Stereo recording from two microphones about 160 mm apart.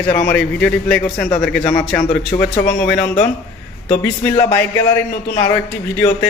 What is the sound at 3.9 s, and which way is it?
Speech, 40° left (ahead or behind).